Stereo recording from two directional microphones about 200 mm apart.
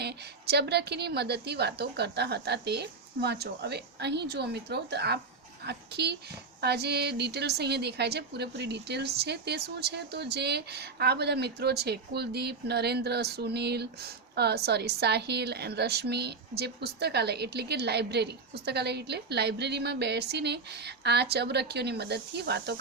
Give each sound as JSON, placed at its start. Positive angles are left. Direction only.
{"t": 0.0, "sound": "a woman's voice", "side_deg": -55}